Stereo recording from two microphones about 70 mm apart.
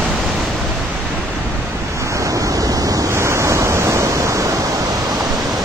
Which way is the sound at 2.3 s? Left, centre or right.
Right.